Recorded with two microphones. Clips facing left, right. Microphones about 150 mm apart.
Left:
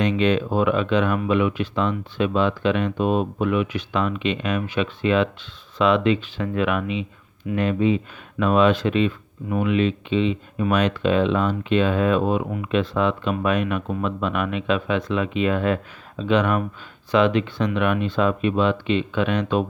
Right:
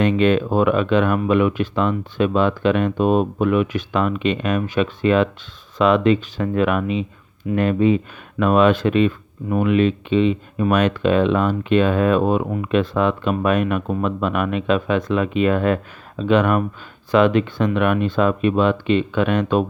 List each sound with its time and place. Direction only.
0.0 s speech: 50° right (ahead or behind)